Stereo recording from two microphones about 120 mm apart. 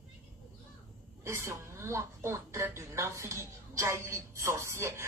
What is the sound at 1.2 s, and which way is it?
A woman's voice, 20° right (ahead or behind).